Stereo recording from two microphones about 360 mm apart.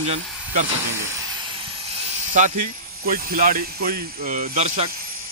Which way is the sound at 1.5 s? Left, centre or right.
Centre.